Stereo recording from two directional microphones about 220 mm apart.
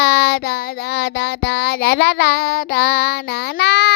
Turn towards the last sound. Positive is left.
turn(degrees=50)  # may be behind; listen again after turning